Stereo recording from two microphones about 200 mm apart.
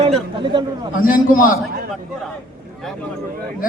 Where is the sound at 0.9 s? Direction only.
45° left (ahead or behind).